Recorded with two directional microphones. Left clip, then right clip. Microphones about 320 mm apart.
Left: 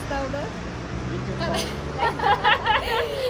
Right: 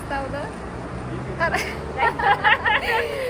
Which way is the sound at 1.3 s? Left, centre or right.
Centre.